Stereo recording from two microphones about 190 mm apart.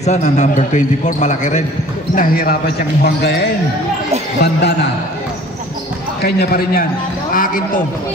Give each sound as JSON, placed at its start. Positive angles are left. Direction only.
{"t": 0.0, "sound": "speech", "side_deg": 35}
{"t": 2.1, "sound": "a man's voice", "side_deg": 50}
{"t": 6.2, "sound": "speech", "side_deg": 50}